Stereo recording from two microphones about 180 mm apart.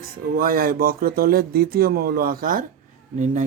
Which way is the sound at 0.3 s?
55° right (ahead or behind).